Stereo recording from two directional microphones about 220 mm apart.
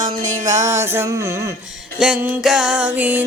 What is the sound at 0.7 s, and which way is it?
Music, 10° right (ahead or behind).